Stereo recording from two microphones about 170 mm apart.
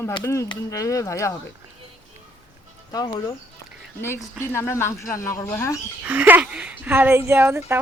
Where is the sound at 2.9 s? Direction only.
20° left (ahead or behind).